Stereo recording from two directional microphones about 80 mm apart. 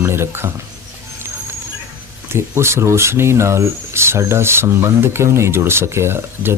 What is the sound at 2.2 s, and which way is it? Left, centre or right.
Speech, right.